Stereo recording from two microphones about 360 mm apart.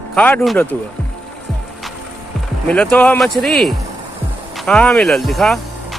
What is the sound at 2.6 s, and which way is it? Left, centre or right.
Speech, centre.